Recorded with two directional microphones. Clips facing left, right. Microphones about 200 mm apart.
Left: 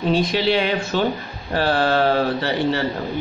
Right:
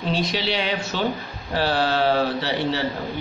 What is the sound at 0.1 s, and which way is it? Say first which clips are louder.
Speech: left 6 dB; 55° left (ahead or behind).